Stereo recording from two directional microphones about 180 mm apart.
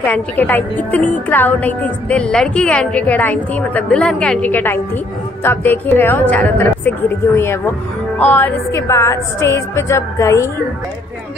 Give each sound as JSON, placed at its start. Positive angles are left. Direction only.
{"t": 0.0, "sound": "a woman's voice", "side_deg": 10}